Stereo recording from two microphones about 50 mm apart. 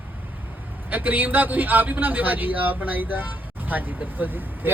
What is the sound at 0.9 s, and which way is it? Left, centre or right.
A man's voice, right.